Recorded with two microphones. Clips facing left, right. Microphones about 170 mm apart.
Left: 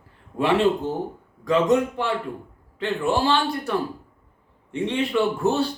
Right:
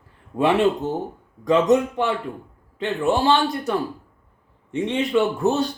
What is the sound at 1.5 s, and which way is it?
Speech, 20° right (ahead or behind).